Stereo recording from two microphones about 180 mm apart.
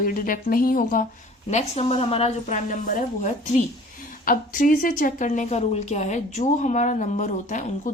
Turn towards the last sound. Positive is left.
turn(degrees=45)  # may be behind; listen again after turning